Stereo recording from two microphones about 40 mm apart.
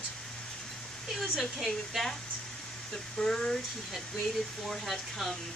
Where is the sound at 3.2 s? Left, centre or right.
Centre.